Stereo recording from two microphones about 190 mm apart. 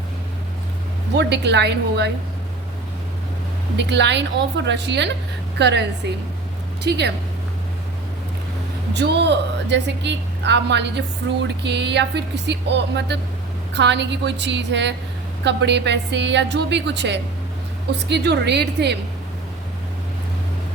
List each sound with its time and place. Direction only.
1.1 s a woman's voice: 65° right (ahead or behind)
3.8 s a woman's voice: 65° right (ahead or behind)
8.9 s a woman's voice: 65° right (ahead or behind)